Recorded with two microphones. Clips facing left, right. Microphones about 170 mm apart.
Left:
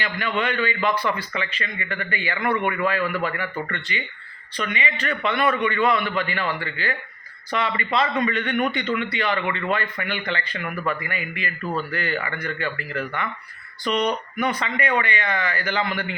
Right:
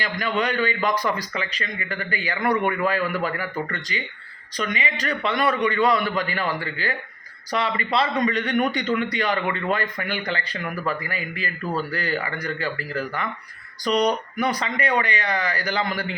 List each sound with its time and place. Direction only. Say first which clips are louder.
0.0 s a man's voice: right 1 dB; 40° right (ahead or behind)